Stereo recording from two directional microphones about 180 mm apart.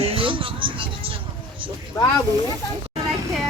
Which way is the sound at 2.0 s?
15° left (ahead or behind).